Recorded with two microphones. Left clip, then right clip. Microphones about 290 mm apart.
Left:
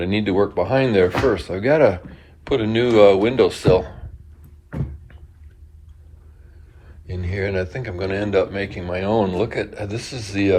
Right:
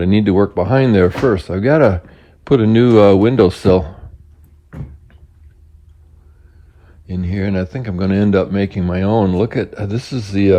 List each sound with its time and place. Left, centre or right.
0.0 s speech: right
7.4 s speech: right